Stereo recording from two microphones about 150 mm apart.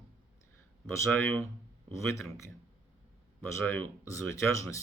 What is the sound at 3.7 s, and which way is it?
Speech, 15° left (ahead or behind).